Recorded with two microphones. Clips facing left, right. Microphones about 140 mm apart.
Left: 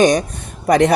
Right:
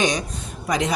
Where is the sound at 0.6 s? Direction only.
60° left (ahead or behind).